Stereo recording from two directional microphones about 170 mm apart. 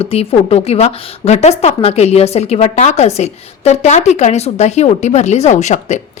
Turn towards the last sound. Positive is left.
turn(degrees=45)  # may be behind; listen again after turning